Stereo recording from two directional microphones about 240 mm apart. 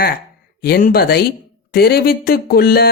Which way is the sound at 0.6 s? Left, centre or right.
Left.